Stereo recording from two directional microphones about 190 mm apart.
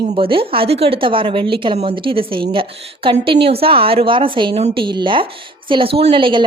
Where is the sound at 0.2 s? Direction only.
30° right (ahead or behind).